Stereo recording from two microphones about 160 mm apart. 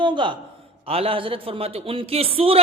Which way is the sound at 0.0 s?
30° right (ahead or behind).